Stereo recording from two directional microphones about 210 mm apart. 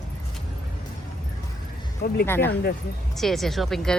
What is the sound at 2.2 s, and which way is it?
Speech, 10° left (ahead or behind).